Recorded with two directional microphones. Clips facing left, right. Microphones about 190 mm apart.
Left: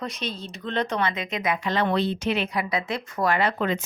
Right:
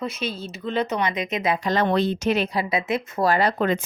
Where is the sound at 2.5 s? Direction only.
25° right (ahead or behind); by 3.8 s 45° right (ahead or behind).